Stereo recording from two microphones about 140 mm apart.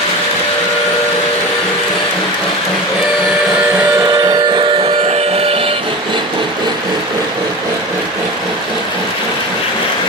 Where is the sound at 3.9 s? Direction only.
25° right (ahead or behind).